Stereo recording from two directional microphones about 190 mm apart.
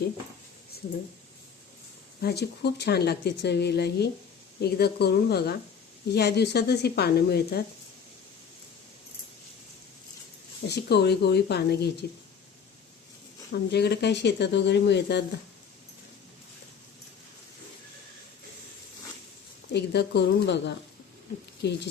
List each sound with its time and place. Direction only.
2.2 s speech: 60° left (ahead or behind)
10.7 s speech: 60° left (ahead or behind)
13.5 s speech: 60° left (ahead or behind)
19.7 s speech: 60° left (ahead or behind)